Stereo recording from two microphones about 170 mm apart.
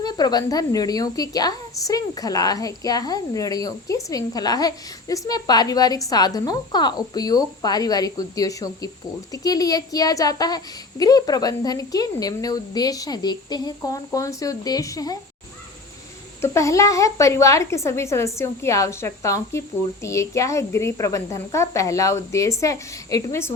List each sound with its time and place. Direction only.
0.0 s a woman's voice: 25° left (ahead or behind)
16.4 s a woman's voice: 20° left (ahead or behind)